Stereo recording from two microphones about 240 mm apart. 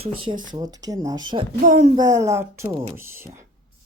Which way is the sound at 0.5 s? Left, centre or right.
Centre.